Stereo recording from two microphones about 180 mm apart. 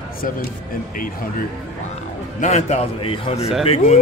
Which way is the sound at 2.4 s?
40° left (ahead or behind).